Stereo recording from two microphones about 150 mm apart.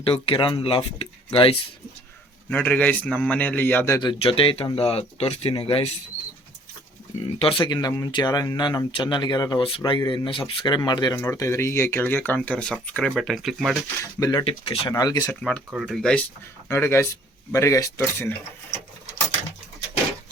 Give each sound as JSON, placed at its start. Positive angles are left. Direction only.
{"t": 0.0, "sound": "speech", "side_deg": 40}
{"t": 2.5, "sound": "speech", "side_deg": 10}
{"t": 4.0, "sound": "speech", "side_deg": 35}
{"t": 7.2, "sound": "speech", "side_deg": 40}
{"t": 14.0, "sound": "speech", "side_deg": 20}
{"t": 14.4, "sound": "speech", "side_deg": 40}
{"t": 14.9, "sound": "speech", "side_deg": 25}
{"t": 15.4, "sound": "speech", "side_deg": 5}
{"t": 16.6, "sound": "speech", "side_deg": 15}